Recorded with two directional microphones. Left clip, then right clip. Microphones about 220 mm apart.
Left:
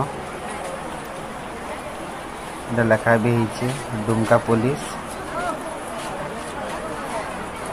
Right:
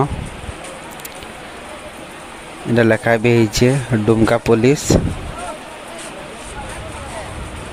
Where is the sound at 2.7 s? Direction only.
55° right (ahead or behind).